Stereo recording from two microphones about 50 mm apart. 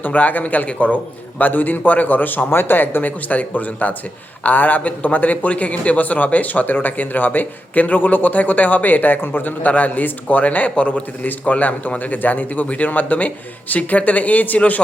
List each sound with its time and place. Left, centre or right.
0.0 s a man's voice: left
11.2 s a man's voice: left